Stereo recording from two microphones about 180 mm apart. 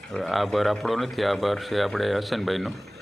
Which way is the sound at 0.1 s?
Centre (ahead or behind).